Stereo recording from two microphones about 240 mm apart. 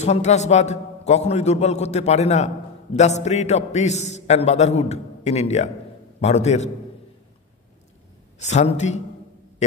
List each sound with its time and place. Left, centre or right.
0.0 s a man's voice: left
8.4 s a man's voice: left